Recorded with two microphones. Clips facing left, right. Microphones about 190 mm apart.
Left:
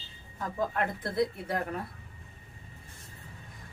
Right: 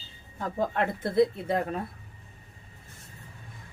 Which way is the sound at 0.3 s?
30° right (ahead or behind).